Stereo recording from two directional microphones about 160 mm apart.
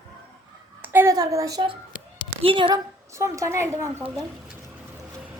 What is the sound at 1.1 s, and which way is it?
A woman's voice, 20° right (ahead or behind).